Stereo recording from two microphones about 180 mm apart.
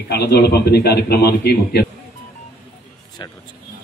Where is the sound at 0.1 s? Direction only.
65° left (ahead or behind).